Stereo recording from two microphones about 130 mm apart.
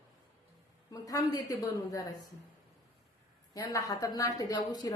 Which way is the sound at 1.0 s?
25° left (ahead or behind).